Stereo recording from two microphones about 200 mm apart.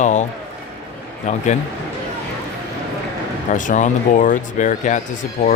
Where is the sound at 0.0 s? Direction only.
35° left (ahead or behind).